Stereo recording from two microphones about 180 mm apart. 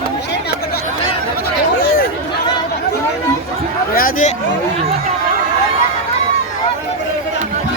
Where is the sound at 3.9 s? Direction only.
50° left (ahead or behind).